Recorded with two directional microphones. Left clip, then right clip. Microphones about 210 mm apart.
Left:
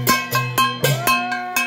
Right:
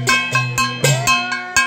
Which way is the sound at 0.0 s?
50° left (ahead or behind).